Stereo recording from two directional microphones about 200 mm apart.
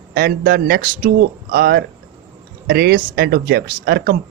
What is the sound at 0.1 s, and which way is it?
Speech, 50° right (ahead or behind).